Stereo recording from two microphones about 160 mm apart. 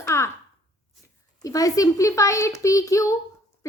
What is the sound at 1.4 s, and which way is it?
A child's voice, 20° left (ahead or behind).